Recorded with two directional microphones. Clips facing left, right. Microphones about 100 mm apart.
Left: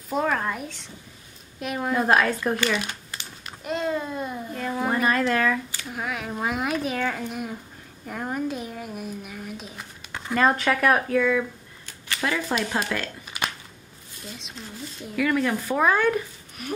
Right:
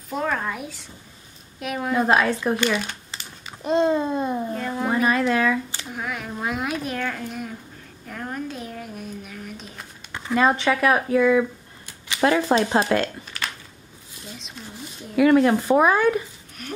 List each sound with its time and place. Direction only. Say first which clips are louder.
0.1 s a woman's voice: left 1 dB; centre (ahead or behind)
3.6 s a child's voice: right 7 dB; 25° right (ahead or behind)
4.6 s a woman's voice: left 2 dB; centre (ahead or behind)
8.1 s a sound: left 3 dB; 10° left (ahead or behind)
10.3 s speech: right 2 dB; centre (ahead or behind)
12.2 s speech: right 7 dB; 40° right (ahead or behind)
15.1 s a child's voice: right 7 dB; 30° right (ahead or behind)
15.9 s speech: right 2 dB; 10° right (ahead or behind)
16.6 s a woman's voice: left 3 dB; 5° left (ahead or behind)